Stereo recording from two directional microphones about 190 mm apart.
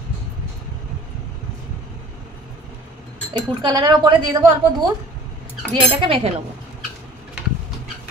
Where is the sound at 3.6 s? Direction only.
25° right (ahead or behind).